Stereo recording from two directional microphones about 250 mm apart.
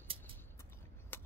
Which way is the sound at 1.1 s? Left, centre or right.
Centre.